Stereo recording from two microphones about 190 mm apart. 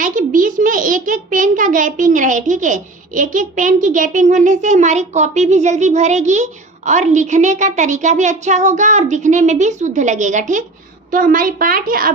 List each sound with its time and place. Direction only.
0.0 s a child's voice: 45° right (ahead or behind)